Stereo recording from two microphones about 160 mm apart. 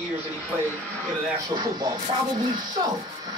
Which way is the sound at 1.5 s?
25° right (ahead or behind).